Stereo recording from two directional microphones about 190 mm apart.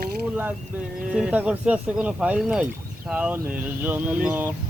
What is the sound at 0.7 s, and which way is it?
Speech, 10° right (ahead or behind).